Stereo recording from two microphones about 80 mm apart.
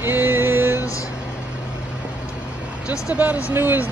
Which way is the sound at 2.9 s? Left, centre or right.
Centre.